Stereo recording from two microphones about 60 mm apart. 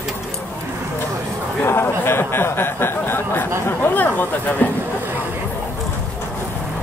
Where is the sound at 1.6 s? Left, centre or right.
Left.